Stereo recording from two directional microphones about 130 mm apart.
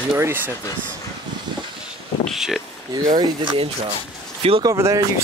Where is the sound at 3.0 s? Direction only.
30° right (ahead or behind).